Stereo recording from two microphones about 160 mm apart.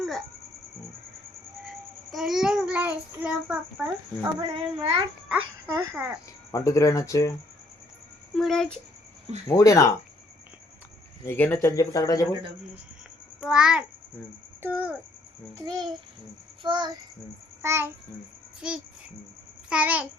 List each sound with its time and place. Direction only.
2.0 s child singing: centre (ahead or behind)
4.4 s a child's voice: 35° right (ahead or behind)
5.3 s speech: 10° right (ahead or behind)
6.5 s speech: 20° left (ahead or behind)
8.4 s child singing: 5° left (ahead or behind)
9.5 s speech: 20° left (ahead or behind)
11.3 s speech: 10° left (ahead or behind)
13.4 s child singing: 5° right (ahead or behind)
14.6 s speech: 10° right (ahead or behind)
16.6 s child singing: 25° right (ahead or behind)
17.6 s speech: 15° right (ahead or behind)
18.6 s child singing: 5° right (ahead or behind)
19.7 s speech: 10° right (ahead or behind)